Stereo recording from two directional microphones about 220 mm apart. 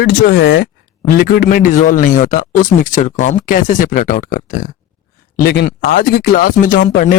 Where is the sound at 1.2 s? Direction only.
40° left (ahead or behind).